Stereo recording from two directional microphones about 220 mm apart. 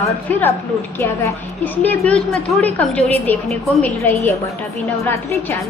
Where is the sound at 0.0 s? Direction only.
10° left (ahead or behind).